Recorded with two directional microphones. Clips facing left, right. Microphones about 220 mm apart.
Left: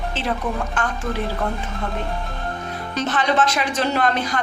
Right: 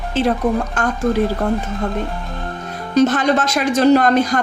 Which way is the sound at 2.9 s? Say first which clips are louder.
Right 7 dB; 45° right (ahead or behind).